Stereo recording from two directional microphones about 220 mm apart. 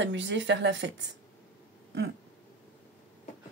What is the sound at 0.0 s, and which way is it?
Speech, 55° right (ahead or behind).